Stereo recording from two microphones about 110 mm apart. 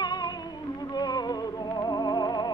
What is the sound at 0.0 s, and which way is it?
Music, 40° left (ahead or behind).